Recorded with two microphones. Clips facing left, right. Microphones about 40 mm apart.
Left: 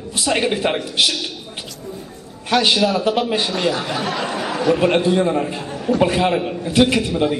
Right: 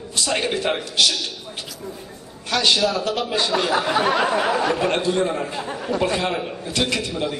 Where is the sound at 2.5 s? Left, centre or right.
Centre.